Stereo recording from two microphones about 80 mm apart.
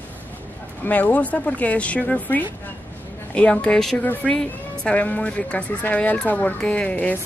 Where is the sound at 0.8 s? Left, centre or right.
Left.